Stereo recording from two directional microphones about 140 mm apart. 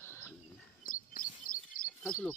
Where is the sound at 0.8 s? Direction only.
80° left.